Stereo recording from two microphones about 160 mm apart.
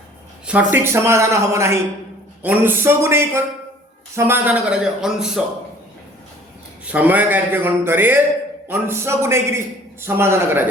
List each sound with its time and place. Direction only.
0.4 s a man's voice: 10° right (ahead or behind)
6.8 s a man's voice: 10° right (ahead or behind)